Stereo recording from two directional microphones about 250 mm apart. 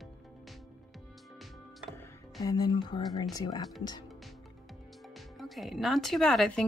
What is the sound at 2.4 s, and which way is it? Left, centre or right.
Speech, centre.